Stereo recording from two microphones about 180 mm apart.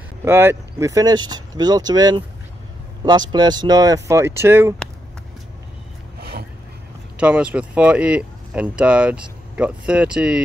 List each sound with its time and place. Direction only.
0.2 s speech: 15° right (ahead or behind)
7.2 s speech: 5° right (ahead or behind)